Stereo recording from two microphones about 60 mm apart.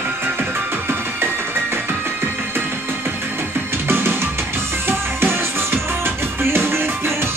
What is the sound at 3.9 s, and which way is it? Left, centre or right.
Music, right.